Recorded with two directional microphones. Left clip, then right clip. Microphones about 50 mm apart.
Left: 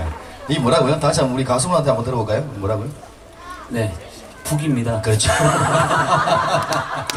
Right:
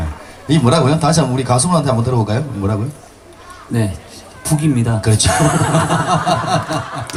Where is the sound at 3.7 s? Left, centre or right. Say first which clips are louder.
Right 3 dB; right.